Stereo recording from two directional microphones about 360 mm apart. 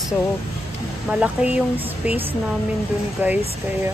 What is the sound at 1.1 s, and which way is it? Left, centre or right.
Speech, centre.